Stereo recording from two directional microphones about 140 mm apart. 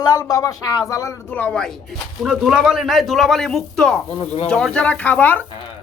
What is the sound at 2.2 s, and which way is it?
Speech, 5° right (ahead or behind).